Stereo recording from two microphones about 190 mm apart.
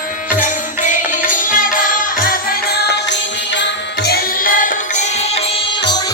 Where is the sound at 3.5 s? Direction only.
65° left (ahead or behind); by 5.4 s 35° left (ahead or behind).